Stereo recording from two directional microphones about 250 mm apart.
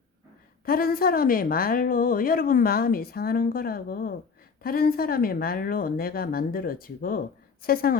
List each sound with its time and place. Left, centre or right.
0.6 s a woman's voice: left